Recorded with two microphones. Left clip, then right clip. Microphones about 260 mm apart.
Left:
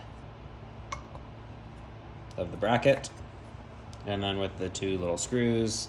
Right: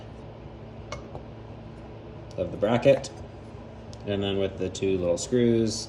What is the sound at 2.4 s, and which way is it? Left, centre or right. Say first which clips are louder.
Speech: right 3 dB; left.